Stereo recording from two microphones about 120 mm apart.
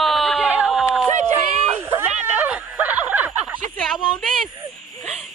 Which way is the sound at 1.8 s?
20° right (ahead or behind).